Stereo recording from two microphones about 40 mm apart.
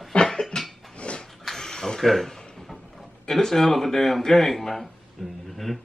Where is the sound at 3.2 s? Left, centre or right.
Centre.